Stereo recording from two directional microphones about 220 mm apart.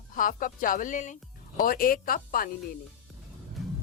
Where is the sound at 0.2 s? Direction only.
40° left (ahead or behind).